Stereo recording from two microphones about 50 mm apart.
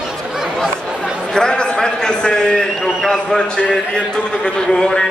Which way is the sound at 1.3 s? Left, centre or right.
Centre.